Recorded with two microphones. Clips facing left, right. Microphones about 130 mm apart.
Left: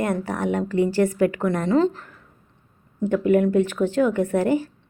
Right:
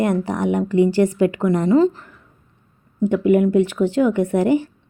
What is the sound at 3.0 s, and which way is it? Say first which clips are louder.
Speech: right 3 dB; 15° right (ahead or behind).